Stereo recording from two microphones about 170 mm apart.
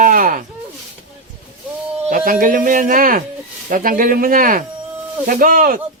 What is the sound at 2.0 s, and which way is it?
A man's voice, 55° right (ahead or behind).